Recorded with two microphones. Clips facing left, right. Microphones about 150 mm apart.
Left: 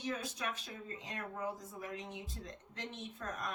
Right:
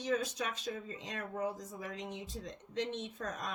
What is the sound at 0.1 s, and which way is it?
A woman's voice, 85° right.